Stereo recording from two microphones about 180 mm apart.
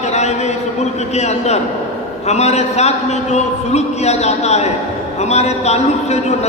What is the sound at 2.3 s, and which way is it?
A man's voice, 35° left (ahead or behind).